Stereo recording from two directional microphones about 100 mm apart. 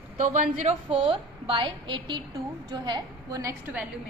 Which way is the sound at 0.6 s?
85° right.